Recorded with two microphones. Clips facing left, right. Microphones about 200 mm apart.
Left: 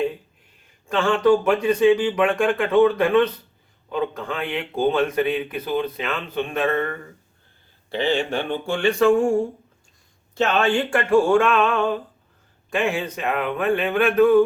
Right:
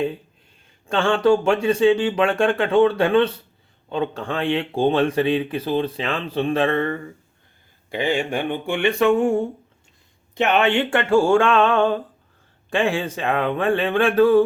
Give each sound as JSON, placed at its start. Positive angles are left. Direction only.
{"t": 0.9, "sound": "speech", "side_deg": -30}
{"t": 7.9, "sound": "speech", "side_deg": -10}